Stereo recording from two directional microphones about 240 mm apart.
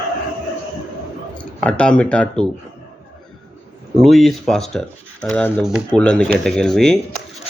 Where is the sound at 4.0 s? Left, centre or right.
Centre.